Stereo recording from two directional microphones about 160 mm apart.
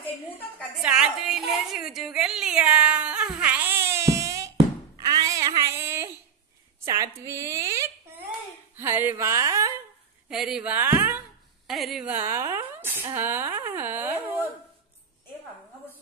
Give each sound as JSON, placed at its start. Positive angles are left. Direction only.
{"t": 0.8, "sound": "a woman's voice", "side_deg": -5}
{"t": 5.1, "sound": "a sound", "side_deg": -20}
{"t": 6.8, "sound": "a woman's voice", "side_deg": -20}
{"t": 10.3, "sound": "speech", "side_deg": -5}
{"t": 11.6, "sound": "a woman's voice", "side_deg": 0}
{"t": 13.7, "sound": "dog", "side_deg": -10}